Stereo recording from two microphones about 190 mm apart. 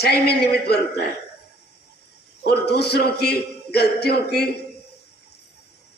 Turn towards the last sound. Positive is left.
turn(degrees=55)  # may be behind; listen again after turning